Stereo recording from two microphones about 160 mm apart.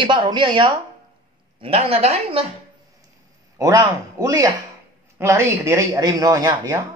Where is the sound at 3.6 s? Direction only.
20° right (ahead or behind).